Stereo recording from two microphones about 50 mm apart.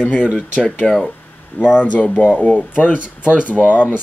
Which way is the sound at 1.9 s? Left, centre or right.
Left.